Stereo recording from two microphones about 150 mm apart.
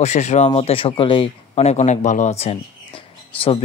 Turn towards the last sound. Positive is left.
turn(degrees=35)  # may be behind; listen again after turning